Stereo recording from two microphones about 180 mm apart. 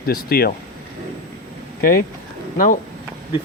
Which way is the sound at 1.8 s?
55° left (ahead or behind).